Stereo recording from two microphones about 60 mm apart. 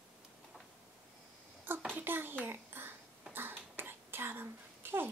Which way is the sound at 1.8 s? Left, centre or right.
Right.